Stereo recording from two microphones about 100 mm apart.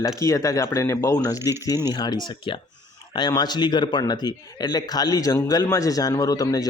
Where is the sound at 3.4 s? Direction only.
45° left (ahead or behind).